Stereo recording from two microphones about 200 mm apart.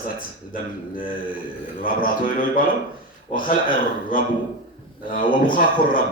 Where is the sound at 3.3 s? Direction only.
45° left (ahead or behind).